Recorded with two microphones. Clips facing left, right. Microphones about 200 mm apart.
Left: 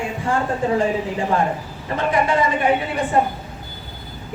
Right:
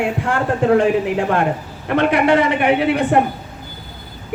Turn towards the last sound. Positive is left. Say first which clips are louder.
# right 5 dB
turn(degrees=-70)  # may be behind; listen again after turning